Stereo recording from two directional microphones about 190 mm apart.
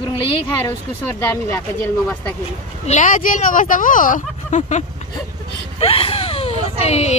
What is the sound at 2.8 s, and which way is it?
Speech, 40° left (ahead or behind).